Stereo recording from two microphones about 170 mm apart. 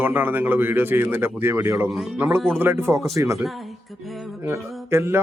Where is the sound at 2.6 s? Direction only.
15° right (ahead or behind).